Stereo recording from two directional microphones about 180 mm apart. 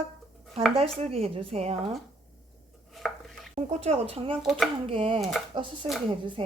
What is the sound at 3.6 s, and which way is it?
Speech, 35° right (ahead or behind).